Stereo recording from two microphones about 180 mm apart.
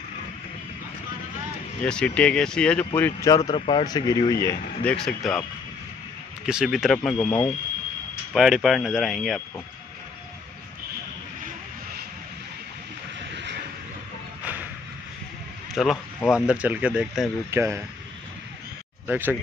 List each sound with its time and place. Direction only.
1.9 s speech: 5° left (ahead or behind)
3.0 s speech: 20° left (ahead or behind)
4.9 s speech: 5° left (ahead or behind)
6.4 s speech: 5° right (ahead or behind)
8.4 s speech: centre (ahead or behind)
13.3 s vehicle: 75° right (ahead or behind)
15.7 s speech: centre (ahead or behind)
17.5 s speech: 15° right (ahead or behind)
19.0 s speech: 10° right (ahead or behind)